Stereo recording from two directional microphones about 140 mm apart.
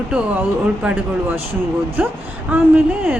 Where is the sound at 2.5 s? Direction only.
15° right (ahead or behind).